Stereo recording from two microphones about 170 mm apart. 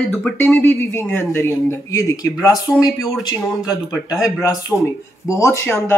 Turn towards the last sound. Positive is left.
turn(degrees=15)  # may be behind; listen again after turning